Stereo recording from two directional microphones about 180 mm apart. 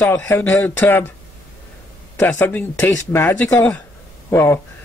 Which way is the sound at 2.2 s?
15° left (ahead or behind).